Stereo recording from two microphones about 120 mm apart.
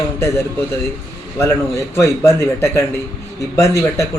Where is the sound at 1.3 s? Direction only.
25° left (ahead or behind).